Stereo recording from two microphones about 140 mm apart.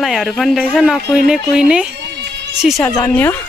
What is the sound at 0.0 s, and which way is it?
Speech, centre (ahead or behind).